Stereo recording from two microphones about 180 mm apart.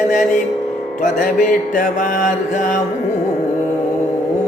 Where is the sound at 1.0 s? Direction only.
45° left (ahead or behind).